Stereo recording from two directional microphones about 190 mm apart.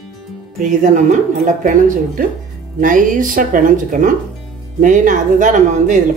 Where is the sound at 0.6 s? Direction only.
40° right (ahead or behind).